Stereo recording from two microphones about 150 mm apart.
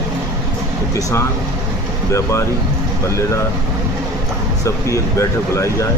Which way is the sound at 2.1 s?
20° left (ahead or behind).